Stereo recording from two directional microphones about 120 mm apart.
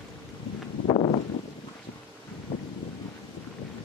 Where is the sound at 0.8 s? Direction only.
60° left (ahead or behind).